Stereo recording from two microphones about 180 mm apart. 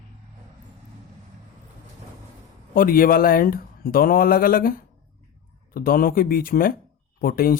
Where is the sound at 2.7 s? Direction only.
55° left (ahead or behind).